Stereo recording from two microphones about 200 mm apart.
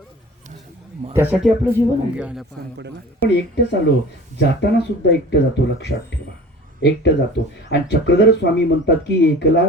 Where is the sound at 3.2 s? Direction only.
55° left (ahead or behind).